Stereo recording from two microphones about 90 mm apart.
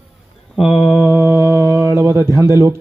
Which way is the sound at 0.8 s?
15° right (ahead or behind).